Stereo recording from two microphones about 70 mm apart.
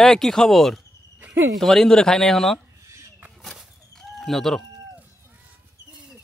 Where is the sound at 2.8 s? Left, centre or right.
Right.